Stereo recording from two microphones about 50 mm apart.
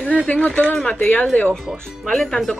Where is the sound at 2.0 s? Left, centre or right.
Centre.